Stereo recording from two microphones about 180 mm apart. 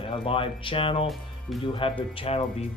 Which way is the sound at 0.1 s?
30° left (ahead or behind).